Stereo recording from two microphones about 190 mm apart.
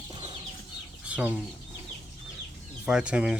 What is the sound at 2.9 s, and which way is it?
Speech, 5° right (ahead or behind).